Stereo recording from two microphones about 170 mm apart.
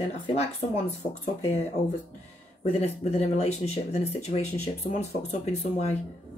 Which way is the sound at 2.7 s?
40° left (ahead or behind).